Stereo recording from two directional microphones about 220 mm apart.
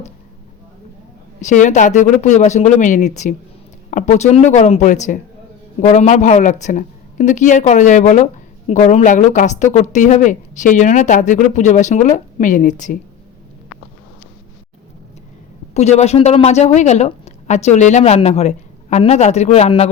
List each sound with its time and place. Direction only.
1.4 s speech: 35° left (ahead or behind)
15.7 s a woman's voice: 30° left (ahead or behind)